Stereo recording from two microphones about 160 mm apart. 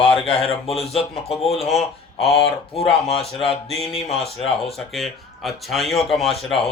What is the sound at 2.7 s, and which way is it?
Speech, 40° left (ahead or behind).